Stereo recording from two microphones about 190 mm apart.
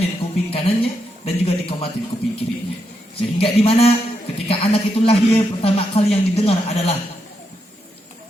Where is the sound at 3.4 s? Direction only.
30° left (ahead or behind).